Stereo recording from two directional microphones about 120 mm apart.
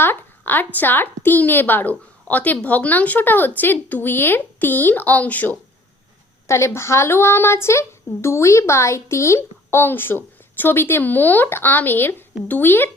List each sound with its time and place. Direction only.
0.0 s a woman's voice: 15° left (ahead or behind)